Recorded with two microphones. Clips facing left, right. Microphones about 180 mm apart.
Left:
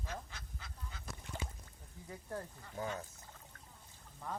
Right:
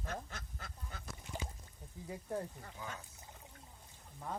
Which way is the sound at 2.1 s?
15° right (ahead or behind).